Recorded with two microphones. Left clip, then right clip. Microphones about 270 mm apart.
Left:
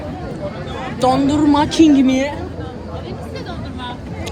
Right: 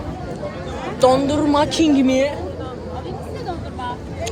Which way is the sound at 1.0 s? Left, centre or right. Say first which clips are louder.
Even; centre.